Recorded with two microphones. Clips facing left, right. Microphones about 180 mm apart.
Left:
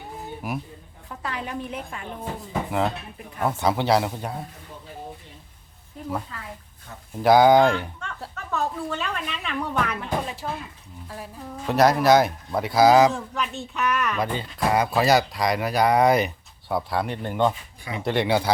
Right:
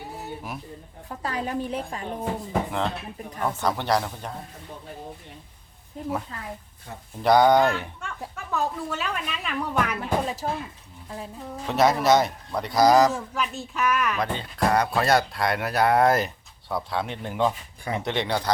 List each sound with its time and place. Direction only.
1.2 s a woman's voice: 35° right (ahead or behind)
3.4 s speech: 10° left (ahead or behind)
7.2 s speech: 5° left (ahead or behind)
10.0 s a woman's voice: 40° right (ahead or behind)
11.6 s speech: centre (ahead or behind)